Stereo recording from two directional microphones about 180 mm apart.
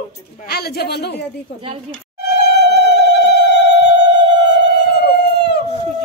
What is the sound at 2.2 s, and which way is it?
Cat, 70° left (ahead or behind).